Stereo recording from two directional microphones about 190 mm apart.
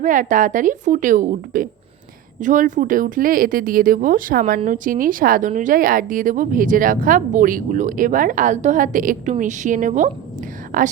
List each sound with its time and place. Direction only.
0.0 s speech: 45° right (ahead or behind)